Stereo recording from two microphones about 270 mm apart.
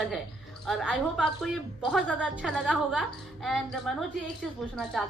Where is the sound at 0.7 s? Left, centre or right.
Centre.